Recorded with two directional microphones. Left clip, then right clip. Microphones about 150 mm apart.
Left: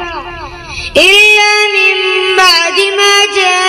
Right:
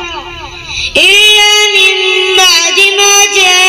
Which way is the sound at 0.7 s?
20° right (ahead or behind).